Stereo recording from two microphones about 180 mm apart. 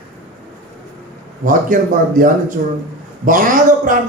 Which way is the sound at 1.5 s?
50° right (ahead or behind).